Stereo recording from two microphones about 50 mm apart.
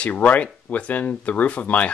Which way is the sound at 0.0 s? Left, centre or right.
Left.